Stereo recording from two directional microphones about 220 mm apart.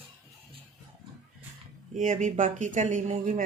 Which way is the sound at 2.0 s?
35° right (ahead or behind).